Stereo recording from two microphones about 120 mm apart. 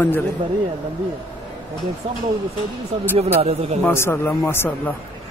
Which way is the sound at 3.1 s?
60° right (ahead or behind).